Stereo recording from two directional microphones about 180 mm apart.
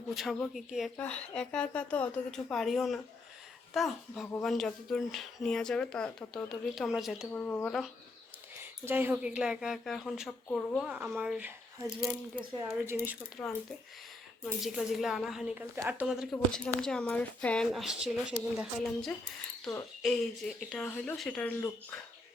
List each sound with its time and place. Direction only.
0.1 s speech: centre (ahead or behind)
8.8 s speech: 10° right (ahead or behind); by 10.8 s 5° left (ahead or behind)
10.8 s speech: 10° right (ahead or behind)
12.4 s speech: 20° right (ahead or behind)
13.3 s speech: 5° left (ahead or behind)
14.6 s speech: centre (ahead or behind)
15.6 s speech: 15° right (ahead or behind); by 21.9 s 10° left (ahead or behind)